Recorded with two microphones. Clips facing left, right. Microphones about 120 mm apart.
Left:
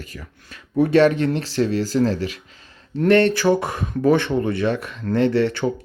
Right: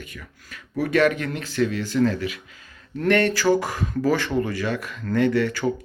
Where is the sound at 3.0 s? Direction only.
25° left (ahead or behind).